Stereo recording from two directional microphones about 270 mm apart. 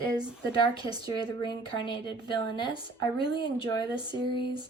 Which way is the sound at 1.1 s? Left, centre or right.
Centre.